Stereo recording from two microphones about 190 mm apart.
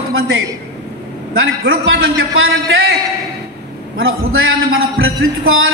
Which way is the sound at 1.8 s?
90° right.